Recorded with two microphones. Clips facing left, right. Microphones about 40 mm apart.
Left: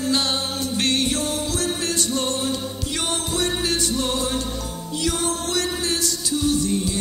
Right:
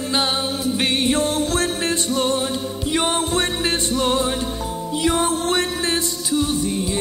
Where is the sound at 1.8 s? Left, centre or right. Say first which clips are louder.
Right 4 dB; right.